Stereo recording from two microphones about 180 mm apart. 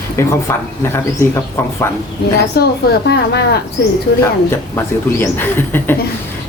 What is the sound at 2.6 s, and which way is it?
Speech, 60° left (ahead or behind).